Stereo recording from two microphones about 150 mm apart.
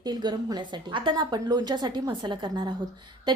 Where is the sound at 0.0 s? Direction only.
30° right (ahead or behind).